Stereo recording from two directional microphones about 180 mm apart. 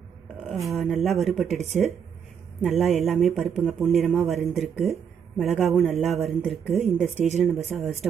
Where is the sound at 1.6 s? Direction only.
40° right (ahead or behind).